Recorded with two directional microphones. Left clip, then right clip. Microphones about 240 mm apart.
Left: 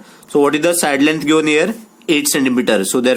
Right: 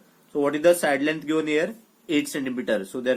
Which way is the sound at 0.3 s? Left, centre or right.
Left.